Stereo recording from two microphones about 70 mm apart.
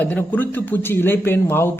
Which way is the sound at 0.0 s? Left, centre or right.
Left.